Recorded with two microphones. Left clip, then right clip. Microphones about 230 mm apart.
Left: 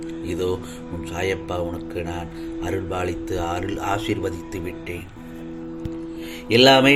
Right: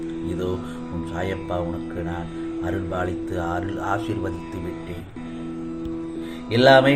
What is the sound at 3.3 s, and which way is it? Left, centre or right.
Speech, left.